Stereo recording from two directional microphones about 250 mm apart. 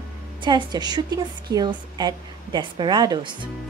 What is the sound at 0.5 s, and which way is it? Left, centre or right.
A woman's voice, centre.